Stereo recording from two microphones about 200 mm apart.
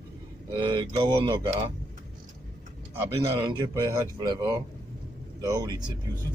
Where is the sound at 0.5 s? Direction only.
25° right (ahead or behind).